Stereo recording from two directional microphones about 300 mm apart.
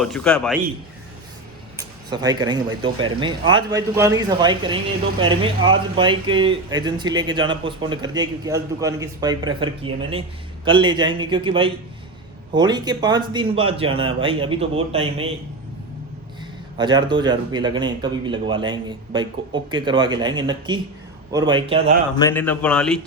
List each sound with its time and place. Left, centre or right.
0.0 s speech: centre
1.7 s speech: centre
16.7 s speech: centre
22.2 s speech: centre